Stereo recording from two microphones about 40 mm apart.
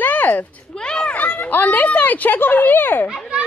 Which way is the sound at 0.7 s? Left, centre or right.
Left.